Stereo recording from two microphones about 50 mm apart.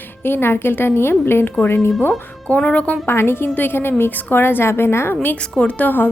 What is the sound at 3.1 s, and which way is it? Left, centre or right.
Speech, left.